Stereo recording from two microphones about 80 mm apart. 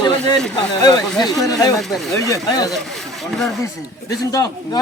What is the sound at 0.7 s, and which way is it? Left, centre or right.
A man's voice, left.